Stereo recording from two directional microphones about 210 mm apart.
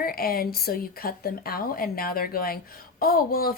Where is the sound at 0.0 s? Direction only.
45° left (ahead or behind).